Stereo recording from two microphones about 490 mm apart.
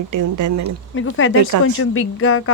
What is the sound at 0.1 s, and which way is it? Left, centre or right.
Speech, right.